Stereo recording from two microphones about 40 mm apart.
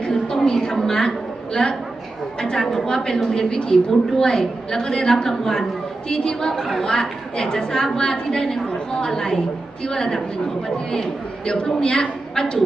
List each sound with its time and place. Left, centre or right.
0.0 s a sound: centre
1.6 s a woman's voice: left
5.2 s a woman's voice: centre
11.4 s a woman's voice: left